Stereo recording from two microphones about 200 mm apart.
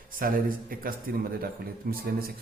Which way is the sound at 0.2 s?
45° right (ahead or behind).